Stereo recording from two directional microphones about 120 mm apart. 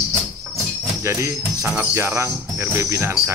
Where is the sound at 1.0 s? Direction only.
25° right (ahead or behind).